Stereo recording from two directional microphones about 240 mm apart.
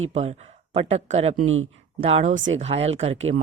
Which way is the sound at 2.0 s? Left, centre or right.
Right.